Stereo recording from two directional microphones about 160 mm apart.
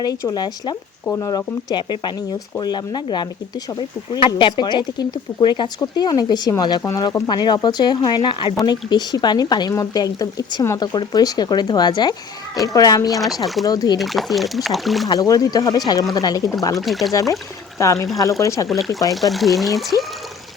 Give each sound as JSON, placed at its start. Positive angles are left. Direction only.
{"t": 0.0, "sound": "speech", "side_deg": 20}
{"t": 13.4, "sound": "speech", "side_deg": 0}
{"t": 13.7, "sound": "speech", "side_deg": 25}
{"t": 14.0, "sound": "speech", "side_deg": 0}
{"t": 15.0, "sound": "speech", "side_deg": 25}
{"t": 16.7, "sound": "speech", "side_deg": 0}
{"t": 17.1, "sound": "speech", "side_deg": 20}
{"t": 19.1, "sound": "speech", "side_deg": 0}